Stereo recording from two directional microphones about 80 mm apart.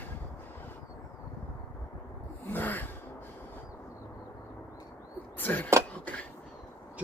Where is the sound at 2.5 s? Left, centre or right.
Left.